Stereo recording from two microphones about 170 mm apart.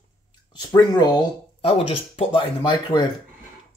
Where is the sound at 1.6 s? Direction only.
35° left (ahead or behind).